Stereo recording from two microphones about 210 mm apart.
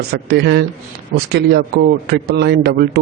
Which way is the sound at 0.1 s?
50° right (ahead or behind).